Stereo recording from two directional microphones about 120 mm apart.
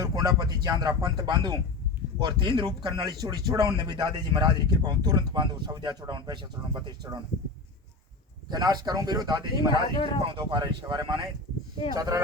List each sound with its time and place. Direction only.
0.0 s speech: 30° right (ahead or behind)
8.4 s speech: 35° right (ahead or behind)
9.9 s speech: 40° left (ahead or behind)
10.5 s speech: 40° right (ahead or behind)